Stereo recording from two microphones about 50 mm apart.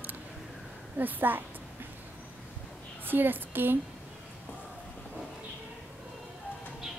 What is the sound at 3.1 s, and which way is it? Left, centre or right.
Speech, right.